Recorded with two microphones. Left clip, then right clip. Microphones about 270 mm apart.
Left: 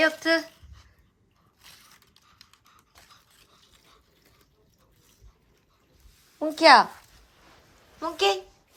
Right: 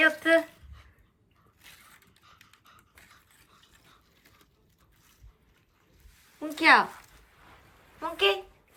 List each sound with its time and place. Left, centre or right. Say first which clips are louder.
0.0 s speech: right 1 dB; centre
1.6 s mechanisms: left 1 dB; left
3.7 s water: left 1 dB; centre
6.4 s speech: left 5 dB; centre
7.9 s a woman's voice: left 2 dB; centre